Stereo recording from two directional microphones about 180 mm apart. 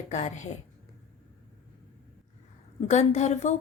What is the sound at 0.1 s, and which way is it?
Speech, 40° left (ahead or behind).